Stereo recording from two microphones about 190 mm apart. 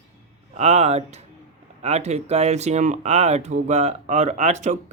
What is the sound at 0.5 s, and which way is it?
Speech, 35° right (ahead or behind).